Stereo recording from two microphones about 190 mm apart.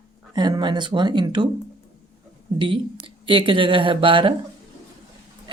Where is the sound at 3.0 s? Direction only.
25° right (ahead or behind).